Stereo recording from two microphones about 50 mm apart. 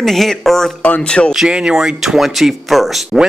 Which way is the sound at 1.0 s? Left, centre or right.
Centre.